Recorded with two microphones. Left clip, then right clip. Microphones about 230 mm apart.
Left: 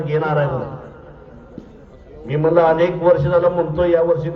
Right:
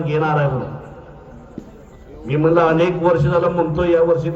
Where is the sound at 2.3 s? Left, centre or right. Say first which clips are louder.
Left 1 dB; right.